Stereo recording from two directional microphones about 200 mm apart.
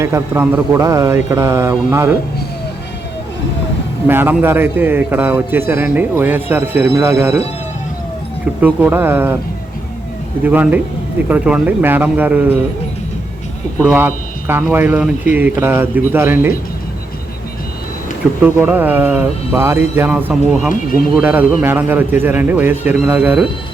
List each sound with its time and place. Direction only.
0.0 s a man's voice: 10° right (ahead or behind)
4.0 s a man's voice: 10° right (ahead or behind)
8.6 s a man's voice: 10° right (ahead or behind)
10.4 s a man's voice: 10° right (ahead or behind)
13.9 s a man's voice: 10° right (ahead or behind)
15.3 s speech: 40° left (ahead or behind)
15.6 s a man's voice: 10° right (ahead or behind)
18.4 s a man's voice: 10° right (ahead or behind)